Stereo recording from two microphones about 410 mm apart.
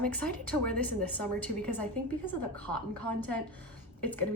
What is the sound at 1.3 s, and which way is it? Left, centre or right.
Speech, centre.